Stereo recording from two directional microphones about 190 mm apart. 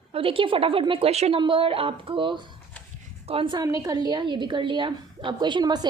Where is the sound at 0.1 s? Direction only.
30° right (ahead or behind).